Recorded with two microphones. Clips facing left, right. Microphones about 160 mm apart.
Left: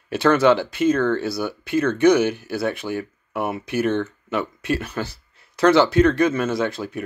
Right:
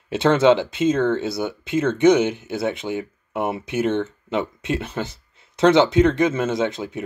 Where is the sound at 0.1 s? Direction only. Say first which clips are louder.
Right 1 dB; 25° right (ahead or behind).